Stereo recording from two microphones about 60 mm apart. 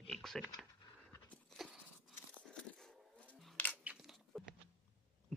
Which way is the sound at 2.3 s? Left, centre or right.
Centre.